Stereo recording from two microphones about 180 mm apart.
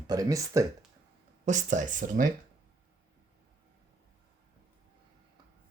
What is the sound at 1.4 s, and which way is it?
Speech, 40° right (ahead or behind).